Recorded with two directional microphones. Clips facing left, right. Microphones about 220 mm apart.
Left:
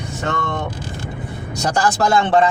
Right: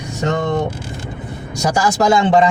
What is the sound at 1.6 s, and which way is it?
Speech, 10° right (ahead or behind).